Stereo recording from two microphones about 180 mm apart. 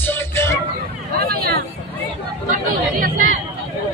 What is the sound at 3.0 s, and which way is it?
Chatter, 50° right (ahead or behind).